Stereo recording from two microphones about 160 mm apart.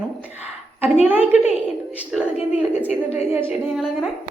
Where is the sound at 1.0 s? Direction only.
10° right (ahead or behind).